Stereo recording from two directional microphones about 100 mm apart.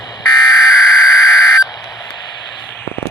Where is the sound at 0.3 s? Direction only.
40° left (ahead or behind).